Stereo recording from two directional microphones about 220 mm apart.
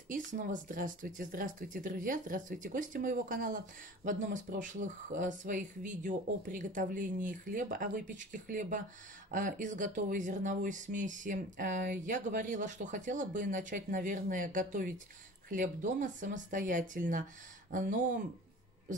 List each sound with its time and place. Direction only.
0.1 s speech: 35° right (ahead or behind)